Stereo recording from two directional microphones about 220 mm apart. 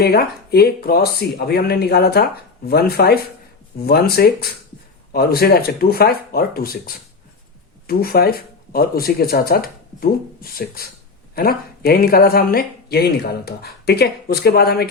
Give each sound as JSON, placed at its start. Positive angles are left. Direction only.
{"t": 0.0, "sound": "speech", "side_deg": 45}